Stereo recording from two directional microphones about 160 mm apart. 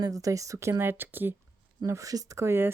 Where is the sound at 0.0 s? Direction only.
20° right (ahead or behind).